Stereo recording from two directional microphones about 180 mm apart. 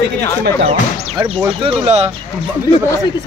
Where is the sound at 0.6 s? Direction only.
30° right (ahead or behind).